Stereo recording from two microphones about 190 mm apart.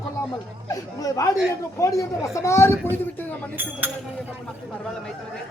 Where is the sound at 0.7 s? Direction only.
15° left (ahead or behind).